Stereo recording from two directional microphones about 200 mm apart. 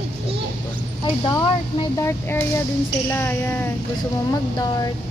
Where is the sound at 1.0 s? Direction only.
20° left (ahead or behind).